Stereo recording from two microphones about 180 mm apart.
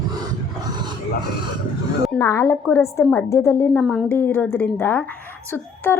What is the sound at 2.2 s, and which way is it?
A woman's voice, 15° left (ahead or behind).